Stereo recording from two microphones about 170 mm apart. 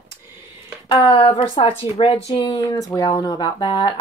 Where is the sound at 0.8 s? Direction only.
30° left (ahead or behind).